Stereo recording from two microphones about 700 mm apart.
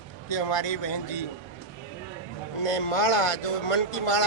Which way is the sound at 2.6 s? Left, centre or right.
Left.